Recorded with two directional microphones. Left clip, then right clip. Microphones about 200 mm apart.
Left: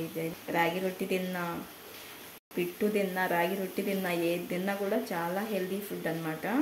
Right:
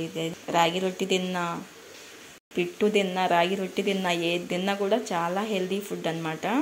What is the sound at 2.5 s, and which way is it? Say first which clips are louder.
Speech: right 6 dB; 15° right (ahead or behind).